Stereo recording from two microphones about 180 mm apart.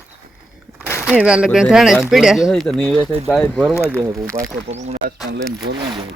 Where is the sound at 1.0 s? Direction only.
5° right (ahead or behind).